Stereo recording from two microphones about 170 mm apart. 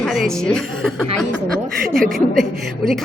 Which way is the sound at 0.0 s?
Centre (ahead or behind).